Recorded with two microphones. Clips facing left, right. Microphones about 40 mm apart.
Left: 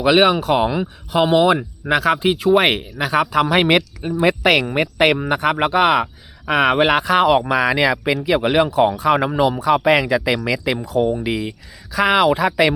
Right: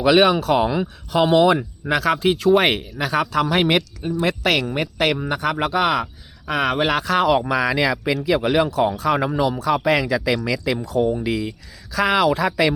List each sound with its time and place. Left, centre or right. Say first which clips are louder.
0.0 s speech: left 1 dB; centre